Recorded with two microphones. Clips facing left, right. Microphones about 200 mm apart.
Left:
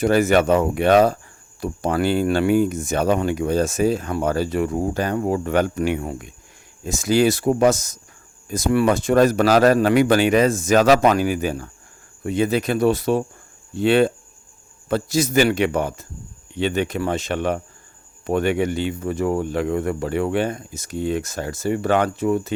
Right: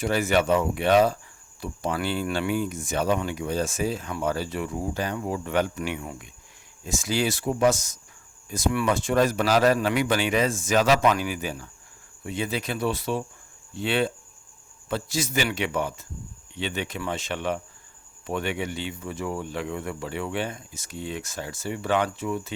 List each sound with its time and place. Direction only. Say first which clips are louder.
0.0 s speech: left 7 dB; 45° left (ahead or behind)